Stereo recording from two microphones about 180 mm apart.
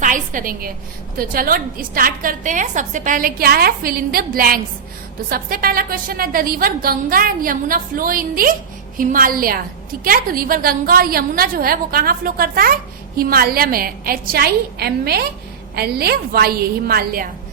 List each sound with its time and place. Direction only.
0.0 s a woman's voice: 45° right (ahead or behind)